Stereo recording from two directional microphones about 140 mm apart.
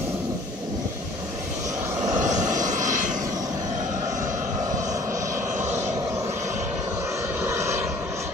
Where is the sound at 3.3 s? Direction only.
25° right (ahead or behind).